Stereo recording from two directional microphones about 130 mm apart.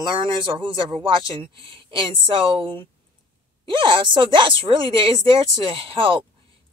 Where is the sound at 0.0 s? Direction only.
35° right (ahead or behind).